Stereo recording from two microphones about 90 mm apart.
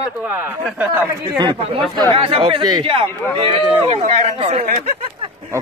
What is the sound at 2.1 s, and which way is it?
Speech, 90° right.